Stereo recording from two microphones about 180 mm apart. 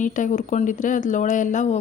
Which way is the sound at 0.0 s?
45° left (ahead or behind).